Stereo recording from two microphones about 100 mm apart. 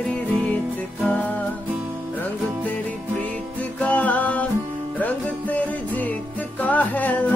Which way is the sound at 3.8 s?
15° left (ahead or behind).